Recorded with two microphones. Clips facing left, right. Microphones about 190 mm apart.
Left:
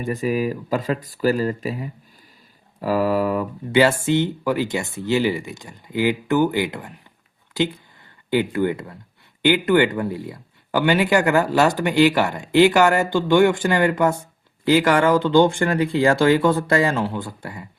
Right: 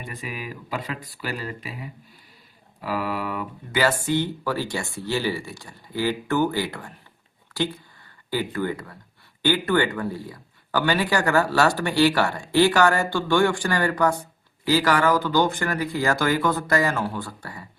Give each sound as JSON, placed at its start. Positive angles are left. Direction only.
{"t": 0.0, "sound": "speech", "side_deg": 45}
{"t": 2.8, "sound": "mantra", "side_deg": 40}
{"t": 4.0, "sound": "speech", "side_deg": 25}